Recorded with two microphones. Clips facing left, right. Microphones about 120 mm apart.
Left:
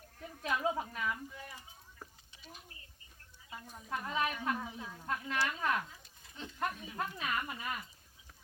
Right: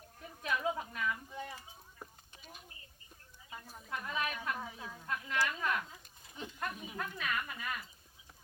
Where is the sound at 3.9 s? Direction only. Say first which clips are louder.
Left 3 dB; 25° left (ahead or behind).